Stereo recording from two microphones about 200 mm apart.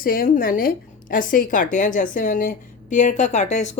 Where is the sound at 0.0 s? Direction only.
45° left (ahead or behind).